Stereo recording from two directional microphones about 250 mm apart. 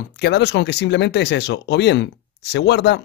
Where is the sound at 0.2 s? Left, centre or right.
Left.